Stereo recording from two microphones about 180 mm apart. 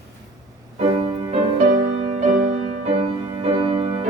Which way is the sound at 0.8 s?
40° right (ahead or behind).